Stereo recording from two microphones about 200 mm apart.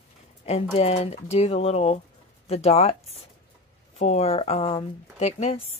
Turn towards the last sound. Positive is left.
turn(degrees=30)  # may be behind; listen again after turning